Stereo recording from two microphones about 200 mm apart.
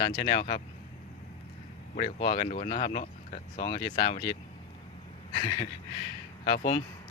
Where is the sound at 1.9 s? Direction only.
30° left (ahead or behind).